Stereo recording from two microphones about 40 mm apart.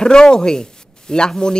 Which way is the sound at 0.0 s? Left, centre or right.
Centre.